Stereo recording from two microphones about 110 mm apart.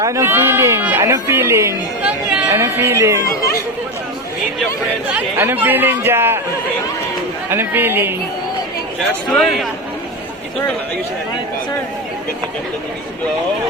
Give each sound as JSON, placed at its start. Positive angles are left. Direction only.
{"t": 0.0, "sound": "speech", "side_deg": -25}
{"t": 0.9, "sound": "a sound", "side_deg": -20}
{"t": 1.1, "sound": "speech", "side_deg": -25}
{"t": 2.0, "sound": "speech", "side_deg": -10}
{"t": 5.1, "sound": "speech", "side_deg": -20}
{"t": 7.5, "sound": "speech", "side_deg": -20}
{"t": 9.3, "sound": "a man's voice", "side_deg": 0}